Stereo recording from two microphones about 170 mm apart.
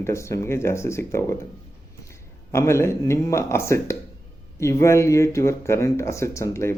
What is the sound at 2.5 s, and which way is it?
Speech, 15° left (ahead or behind).